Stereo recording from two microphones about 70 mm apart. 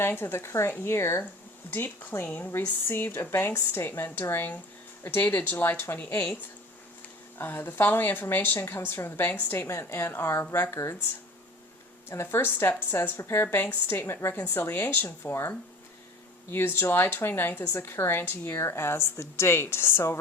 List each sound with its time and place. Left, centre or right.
0.0 s speech: left
12.0 s speech: left